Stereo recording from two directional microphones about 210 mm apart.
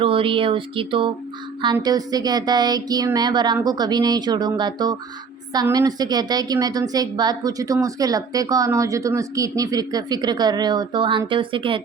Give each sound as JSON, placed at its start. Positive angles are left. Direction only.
{"t": 0.0, "sound": "a woman's voice", "side_deg": -25}